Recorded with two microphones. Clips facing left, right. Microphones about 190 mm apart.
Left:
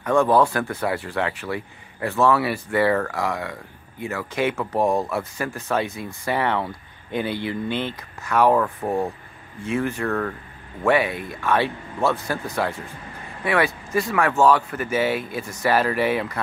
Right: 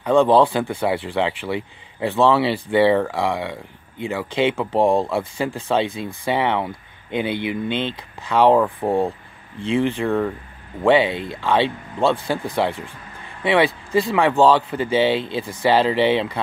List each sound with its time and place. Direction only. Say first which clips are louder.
0.0 s speech: right 3 dB; 15° right (ahead or behind)
9.6 s speech: right 4 dB; 30° right (ahead or behind)
10.0 s speech: right 4 dB; 15° right (ahead or behind)
10.9 s speech: right 4 dB; 25° right (ahead or behind)